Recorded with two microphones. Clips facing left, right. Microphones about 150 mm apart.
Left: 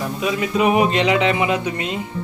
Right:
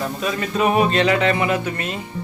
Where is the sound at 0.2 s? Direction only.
10° left (ahead or behind).